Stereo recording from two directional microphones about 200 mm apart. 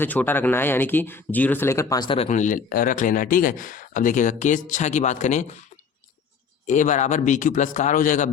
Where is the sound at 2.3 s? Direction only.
40° left (ahead or behind).